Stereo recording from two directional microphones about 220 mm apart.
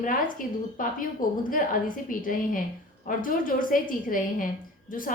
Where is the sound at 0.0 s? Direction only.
40° left (ahead or behind).